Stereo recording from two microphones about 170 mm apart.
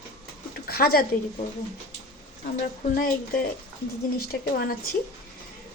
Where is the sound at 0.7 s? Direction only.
65° left (ahead or behind).